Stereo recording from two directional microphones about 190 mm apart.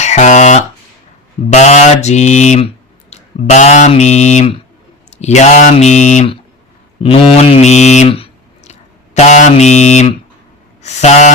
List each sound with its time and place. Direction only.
0.0 s speech: 40° left (ahead or behind)
7.0 s a sound: 30° left (ahead or behind)
9.1 s speech: 40° left (ahead or behind)